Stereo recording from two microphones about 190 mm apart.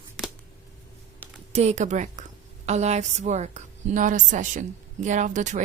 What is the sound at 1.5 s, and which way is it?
A woman's voice, 35° right (ahead or behind).